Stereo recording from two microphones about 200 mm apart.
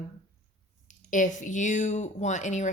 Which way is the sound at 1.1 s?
40° left (ahead or behind).